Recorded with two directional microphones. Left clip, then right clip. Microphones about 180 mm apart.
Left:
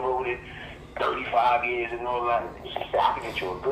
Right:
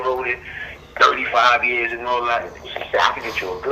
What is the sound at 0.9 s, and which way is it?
Speech, 35° right (ahead or behind).